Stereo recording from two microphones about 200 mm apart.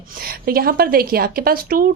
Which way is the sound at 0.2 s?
50° right (ahead or behind).